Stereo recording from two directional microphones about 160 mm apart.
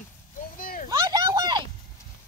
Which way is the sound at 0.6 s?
65° left (ahead or behind).